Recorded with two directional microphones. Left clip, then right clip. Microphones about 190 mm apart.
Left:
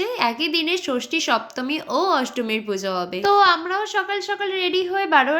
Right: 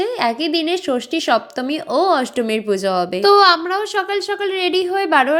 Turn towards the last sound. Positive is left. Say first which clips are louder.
# right 3 dB
turn(degrees=-25)  # may be behind; listen again after turning